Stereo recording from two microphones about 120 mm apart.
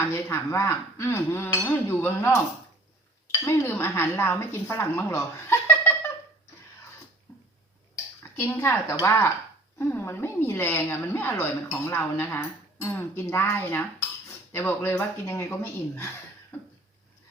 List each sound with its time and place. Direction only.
0.1 s speech: 20° left (ahead or behind)
3.4 s speech: 20° left (ahead or behind)
8.2 s speech: 20° left (ahead or behind)